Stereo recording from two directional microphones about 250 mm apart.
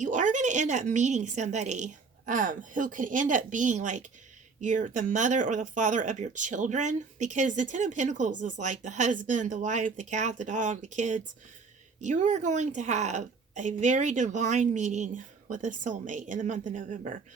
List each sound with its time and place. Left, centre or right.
0.0 s a woman's voice: right